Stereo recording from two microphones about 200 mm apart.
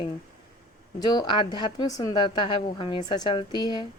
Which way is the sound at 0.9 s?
20° left (ahead or behind).